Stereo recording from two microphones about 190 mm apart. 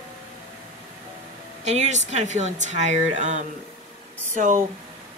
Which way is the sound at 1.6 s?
35° right (ahead or behind).